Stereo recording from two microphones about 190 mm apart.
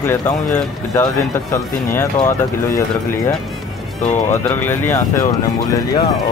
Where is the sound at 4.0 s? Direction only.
40° left (ahead or behind).